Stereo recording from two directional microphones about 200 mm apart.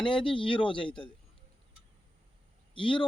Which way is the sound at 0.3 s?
25° left (ahead or behind).